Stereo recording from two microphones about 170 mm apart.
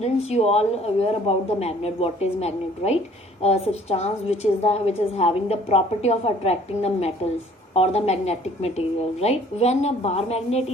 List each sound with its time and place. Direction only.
0.0 s a woman's voice: 40° left (ahead or behind)